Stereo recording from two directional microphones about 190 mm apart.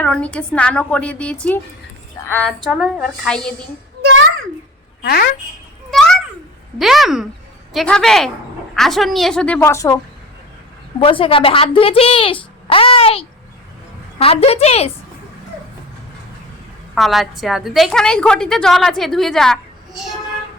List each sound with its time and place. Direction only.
0.0 s a woman's voice: 5° left (ahead or behind)
5.0 s a woman's voice: 55° left (ahead or behind)
5.9 s a sound: centre (ahead or behind)
6.7 s a woman's voice: centre (ahead or behind); by 10.0 s 15° left (ahead or behind)
11.0 s a woman's voice: 25° left (ahead or behind)
16.9 s a woman's voice: centre (ahead or behind)